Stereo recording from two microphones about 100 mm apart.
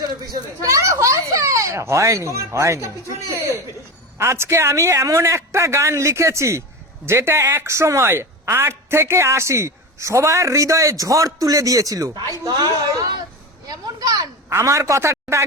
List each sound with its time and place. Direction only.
0.6 s a man's voice: 30° right (ahead or behind)
13.7 s a woman's voice: 40° right (ahead or behind)